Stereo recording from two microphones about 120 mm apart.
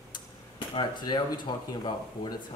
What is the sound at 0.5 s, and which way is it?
Speech, 40° left (ahead or behind).